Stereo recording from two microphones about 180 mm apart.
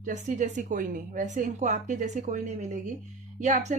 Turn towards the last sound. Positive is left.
turn(degrees=-40)  # may be behind; listen again after turning